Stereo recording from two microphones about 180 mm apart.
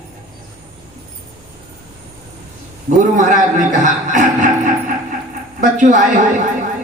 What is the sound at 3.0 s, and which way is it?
A man's voice, 45° right (ahead or behind).